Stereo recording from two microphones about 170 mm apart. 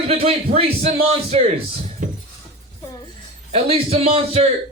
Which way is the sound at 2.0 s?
50° right (ahead or behind).